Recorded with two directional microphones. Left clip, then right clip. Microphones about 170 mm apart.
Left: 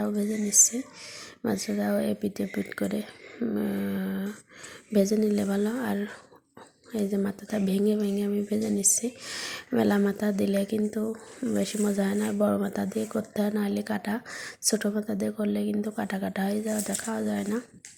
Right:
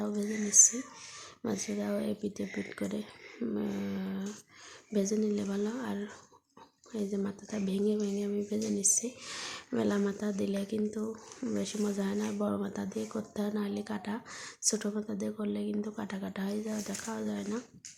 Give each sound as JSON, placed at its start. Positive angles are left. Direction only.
{"t": 0.4, "sound": "a woman's voice", "side_deg": 25}